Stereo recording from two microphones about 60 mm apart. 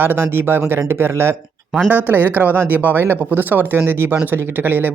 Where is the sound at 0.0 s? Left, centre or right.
Right.